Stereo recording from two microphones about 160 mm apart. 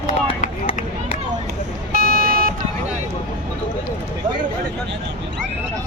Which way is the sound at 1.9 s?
70° right (ahead or behind).